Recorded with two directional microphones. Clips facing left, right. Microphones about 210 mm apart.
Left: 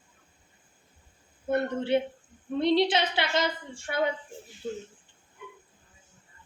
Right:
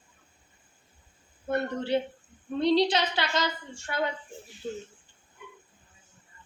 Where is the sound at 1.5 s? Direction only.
25° left (ahead or behind).